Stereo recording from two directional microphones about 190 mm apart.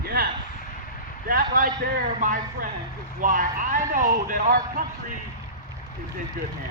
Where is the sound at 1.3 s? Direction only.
50° right (ahead or behind).